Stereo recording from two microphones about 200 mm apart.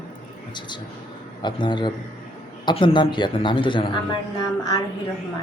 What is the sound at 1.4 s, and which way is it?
A man's voice, 25° left (ahead or behind).